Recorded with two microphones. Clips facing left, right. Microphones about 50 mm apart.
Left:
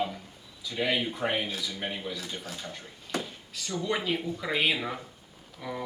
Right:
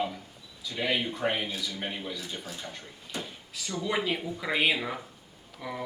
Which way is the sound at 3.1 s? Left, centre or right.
Left.